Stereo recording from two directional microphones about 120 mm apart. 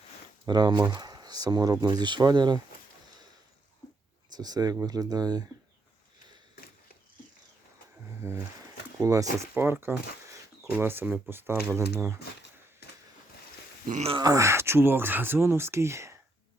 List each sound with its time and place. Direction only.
0.4 s speech: 35° right (ahead or behind)
4.4 s speech: 35° right (ahead or behind)
8.2 s speech: 20° right (ahead or behind)
14.2 s speech: 30° right (ahead or behind)